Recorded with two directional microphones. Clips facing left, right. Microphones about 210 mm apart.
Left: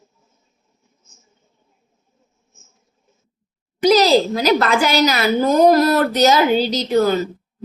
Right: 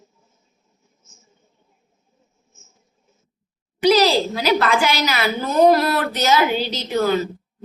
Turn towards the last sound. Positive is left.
turn(degrees=40)  # may be behind; listen again after turning